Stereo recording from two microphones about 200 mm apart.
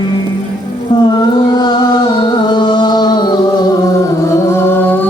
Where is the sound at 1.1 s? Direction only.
20° left (ahead or behind).